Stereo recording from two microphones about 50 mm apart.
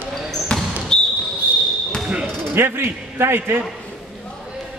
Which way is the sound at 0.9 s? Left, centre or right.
Centre.